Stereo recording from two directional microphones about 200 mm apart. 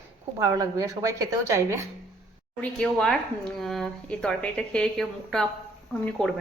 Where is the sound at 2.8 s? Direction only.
5° left (ahead or behind).